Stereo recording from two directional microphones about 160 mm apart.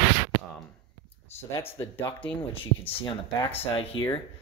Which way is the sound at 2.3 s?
30° left (ahead or behind).